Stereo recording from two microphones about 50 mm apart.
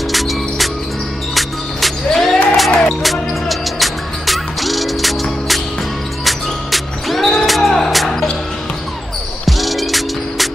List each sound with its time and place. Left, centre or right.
0.1 s music: centre
9.5 s music: centre